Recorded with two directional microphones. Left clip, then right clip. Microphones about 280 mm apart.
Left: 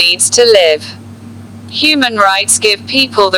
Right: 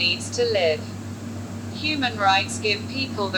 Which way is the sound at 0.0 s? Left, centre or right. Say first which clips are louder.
Left 14 dB; left.